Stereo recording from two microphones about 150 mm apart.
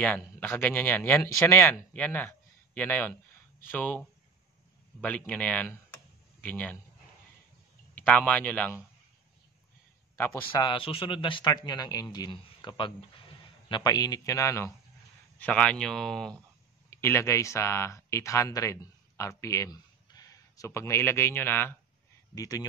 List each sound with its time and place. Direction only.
0.2 s speech: 10° left (ahead or behind)
7.9 s a man's voice: 10° left (ahead or behind)
10.1 s a man's voice: 15° left (ahead or behind)
10.5 s a man's voice: 30° left (ahead or behind)
15.3 s speech: 10° left (ahead or behind)
16.9 s speech: 15° left (ahead or behind)
22.3 s a man's voice: 25° left (ahead or behind)